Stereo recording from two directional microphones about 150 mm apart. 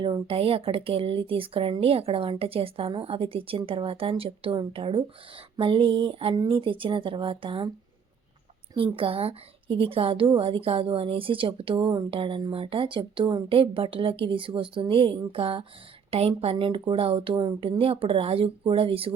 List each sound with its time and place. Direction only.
0.0 s speech: 35° right (ahead or behind)
8.7 s speech: 35° right (ahead or behind)